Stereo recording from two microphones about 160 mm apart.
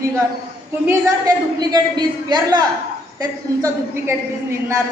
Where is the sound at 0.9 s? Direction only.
20° right (ahead or behind).